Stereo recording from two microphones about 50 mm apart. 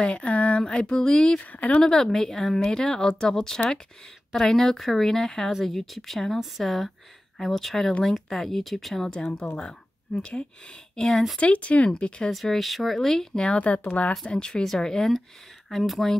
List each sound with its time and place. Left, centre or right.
0.0 s speech: left
1.4 s speech: left
1.8 s speech: centre
11.3 s speech: left
11.9 s speech: centre
12.3 s speech: centre
13.4 s speech: left
14.2 s speech: centre